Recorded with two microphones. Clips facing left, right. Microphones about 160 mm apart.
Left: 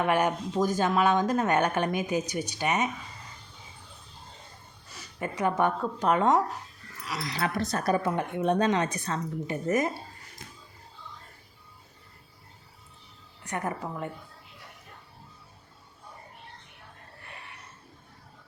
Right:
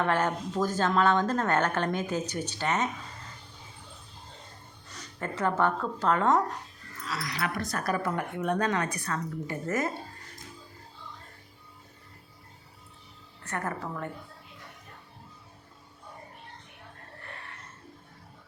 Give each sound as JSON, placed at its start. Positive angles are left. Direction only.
{"t": 0.0, "sound": "speech", "side_deg": 15}
{"t": 4.9, "sound": "speech", "side_deg": 15}
{"t": 7.2, "sound": "speech", "side_deg": 25}
{"t": 13.4, "sound": "speech", "side_deg": 15}